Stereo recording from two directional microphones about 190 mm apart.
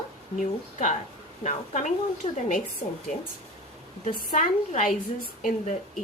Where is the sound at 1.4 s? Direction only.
40° left (ahead or behind).